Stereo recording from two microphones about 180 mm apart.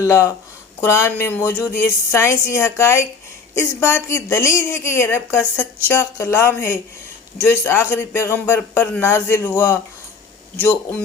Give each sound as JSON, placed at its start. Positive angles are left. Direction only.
{"t": 0.0, "sound": "a woman's voice", "side_deg": 15}